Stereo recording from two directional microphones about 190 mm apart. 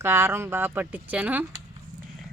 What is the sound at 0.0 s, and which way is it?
Speech, 15° right (ahead or behind).